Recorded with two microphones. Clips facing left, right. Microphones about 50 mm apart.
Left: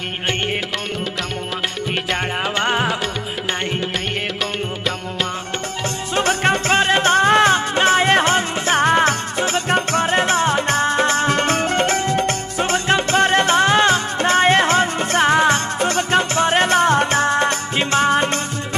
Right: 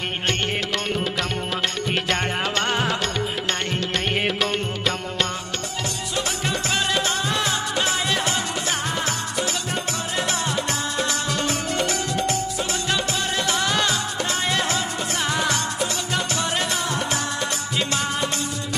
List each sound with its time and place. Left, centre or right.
1.9 s music: centre
6.1 s music: left